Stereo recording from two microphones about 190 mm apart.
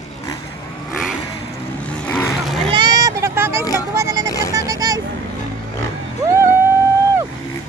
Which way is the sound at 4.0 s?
15° right (ahead or behind).